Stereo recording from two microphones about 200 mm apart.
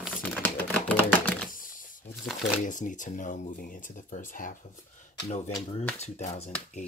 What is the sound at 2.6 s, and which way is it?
Speech, 40° left (ahead or behind).